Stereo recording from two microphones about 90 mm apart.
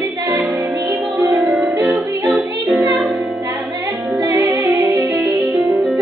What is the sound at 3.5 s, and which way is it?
Music, 35° right (ahead or behind).